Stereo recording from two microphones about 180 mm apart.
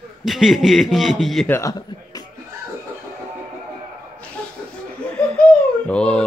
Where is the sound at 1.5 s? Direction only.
20° left (ahead or behind).